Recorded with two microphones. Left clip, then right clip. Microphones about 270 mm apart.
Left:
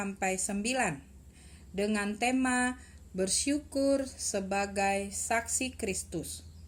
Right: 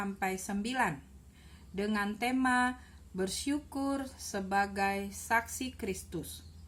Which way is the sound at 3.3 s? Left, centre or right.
Right.